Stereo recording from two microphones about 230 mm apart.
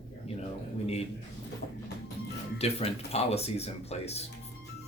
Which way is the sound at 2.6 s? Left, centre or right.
Left.